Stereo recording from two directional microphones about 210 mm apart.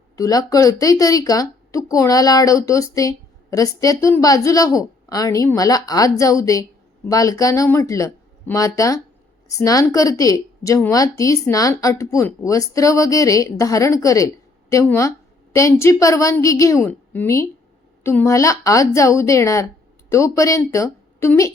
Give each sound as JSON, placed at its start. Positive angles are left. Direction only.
{"t": 0.2, "sound": "a woman's voice", "side_deg": 15}